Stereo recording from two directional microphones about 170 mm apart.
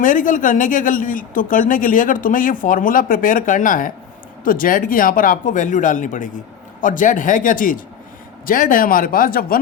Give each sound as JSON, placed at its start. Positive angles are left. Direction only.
{"t": 0.0, "sound": "speech", "side_deg": 50}